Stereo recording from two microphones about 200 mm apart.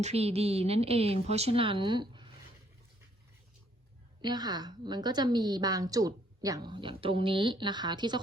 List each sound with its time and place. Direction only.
0.0 s a woman's voice: 30° right (ahead or behind)
4.2 s a woman's voice: 20° right (ahead or behind)